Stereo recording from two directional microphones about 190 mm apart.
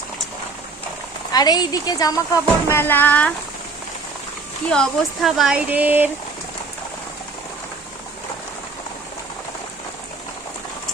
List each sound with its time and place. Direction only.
1.3 s speech: 20° left (ahead or behind)
4.7 s speech: centre (ahead or behind)